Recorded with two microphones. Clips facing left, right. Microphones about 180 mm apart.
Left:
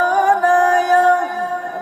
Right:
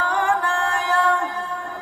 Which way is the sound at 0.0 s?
40° left (ahead or behind).